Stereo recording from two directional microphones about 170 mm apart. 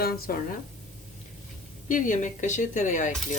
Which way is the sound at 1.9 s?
50° left (ahead or behind).